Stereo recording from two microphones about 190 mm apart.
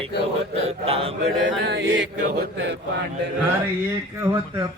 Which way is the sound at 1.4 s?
65° right (ahead or behind).